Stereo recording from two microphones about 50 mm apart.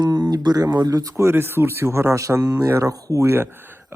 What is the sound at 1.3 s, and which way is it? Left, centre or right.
Speech, right.